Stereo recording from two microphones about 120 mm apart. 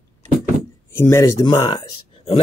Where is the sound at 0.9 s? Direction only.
20° left (ahead or behind).